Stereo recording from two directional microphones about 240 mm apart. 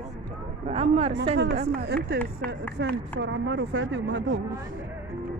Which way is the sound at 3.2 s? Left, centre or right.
Right.